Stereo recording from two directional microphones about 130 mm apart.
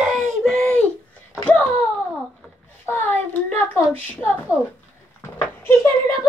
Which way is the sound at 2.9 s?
15° left (ahead or behind).